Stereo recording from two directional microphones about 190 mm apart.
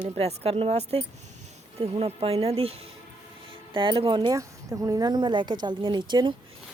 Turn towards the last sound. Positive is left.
turn(degrees=-25)  # may be behind; listen again after turning